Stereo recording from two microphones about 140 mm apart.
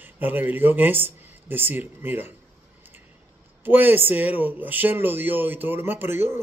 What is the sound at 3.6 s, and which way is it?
Speech, 15° right (ahead or behind).